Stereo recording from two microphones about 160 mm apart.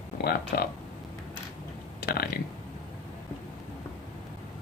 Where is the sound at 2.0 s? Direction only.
75° left (ahead or behind).